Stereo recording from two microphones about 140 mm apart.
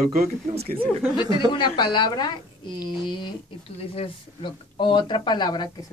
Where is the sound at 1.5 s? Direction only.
35° left (ahead or behind).